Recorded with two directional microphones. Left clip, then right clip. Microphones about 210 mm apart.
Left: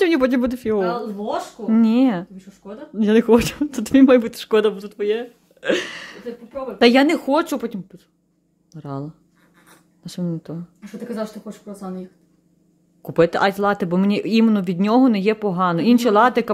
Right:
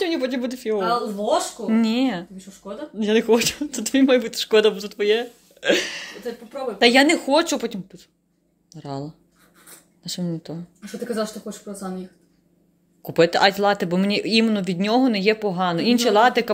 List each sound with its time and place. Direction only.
0.0 s speech: 35° left (ahead or behind); by 10.6 s 15° left (ahead or behind)
13.0 s speech: 15° left (ahead or behind)